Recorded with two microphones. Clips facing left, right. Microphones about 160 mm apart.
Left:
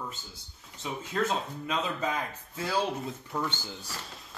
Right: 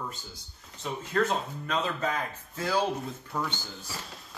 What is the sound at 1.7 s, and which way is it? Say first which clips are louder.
Speech: right 1 dB; 10° left (ahead or behind).